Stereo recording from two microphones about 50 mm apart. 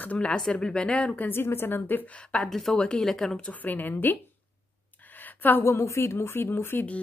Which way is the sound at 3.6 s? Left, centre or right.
Left.